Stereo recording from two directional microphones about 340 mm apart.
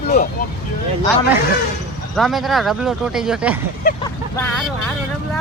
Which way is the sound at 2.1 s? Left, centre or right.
Centre.